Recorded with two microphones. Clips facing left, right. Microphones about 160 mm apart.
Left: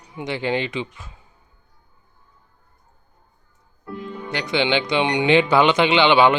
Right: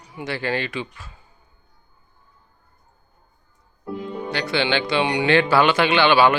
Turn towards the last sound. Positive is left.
turn(degrees=20)  # may be behind; listen again after turning